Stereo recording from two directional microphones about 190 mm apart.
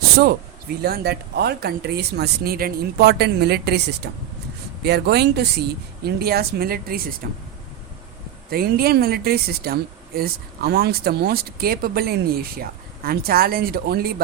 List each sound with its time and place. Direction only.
0.8 s speech: 55° right (ahead or behind)
8.4 s speech: 55° right (ahead or behind)